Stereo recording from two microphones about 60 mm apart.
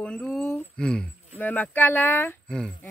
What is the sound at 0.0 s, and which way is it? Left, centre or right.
Speech, centre.